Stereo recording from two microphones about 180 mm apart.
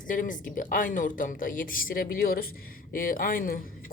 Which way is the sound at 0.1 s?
45° left (ahead or behind).